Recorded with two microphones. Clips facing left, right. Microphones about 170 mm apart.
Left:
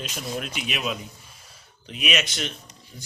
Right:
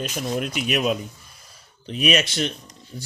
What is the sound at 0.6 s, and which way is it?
A man's voice, 45° right (ahead or behind).